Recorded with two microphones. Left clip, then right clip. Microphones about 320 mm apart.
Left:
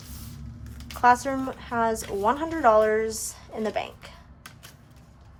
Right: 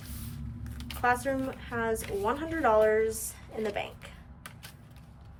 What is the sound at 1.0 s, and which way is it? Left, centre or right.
Speech, centre.